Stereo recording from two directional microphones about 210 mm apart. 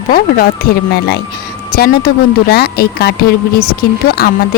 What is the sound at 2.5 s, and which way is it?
Speech, 50° left (ahead or behind).